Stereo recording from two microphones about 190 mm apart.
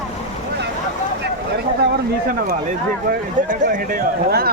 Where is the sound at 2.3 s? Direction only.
50° right (ahead or behind).